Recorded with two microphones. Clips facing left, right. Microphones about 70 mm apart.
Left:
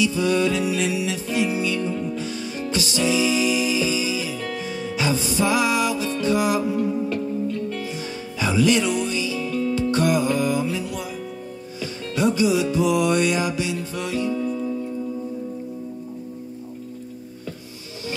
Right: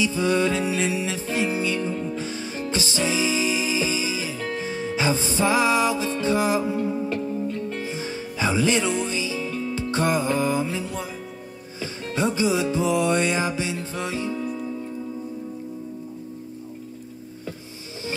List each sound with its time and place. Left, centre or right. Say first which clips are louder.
0.0 s music: left 1 dB; right